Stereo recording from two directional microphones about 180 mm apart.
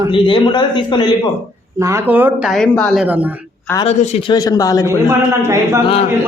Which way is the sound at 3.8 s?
35° left (ahead or behind).